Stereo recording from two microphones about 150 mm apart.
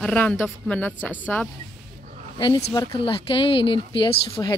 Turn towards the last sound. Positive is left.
turn(degrees=30)  # may be behind; listen again after turning